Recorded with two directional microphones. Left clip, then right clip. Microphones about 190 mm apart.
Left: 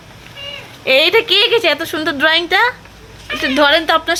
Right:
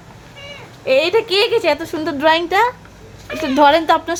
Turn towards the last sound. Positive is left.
turn(degrees=-15)  # may be behind; listen again after turning